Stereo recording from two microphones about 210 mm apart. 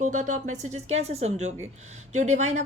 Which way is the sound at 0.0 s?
35° right (ahead or behind).